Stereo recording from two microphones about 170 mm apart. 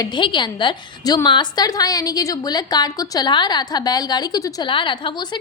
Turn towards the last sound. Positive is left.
turn(degrees=25)  # may be behind; listen again after turning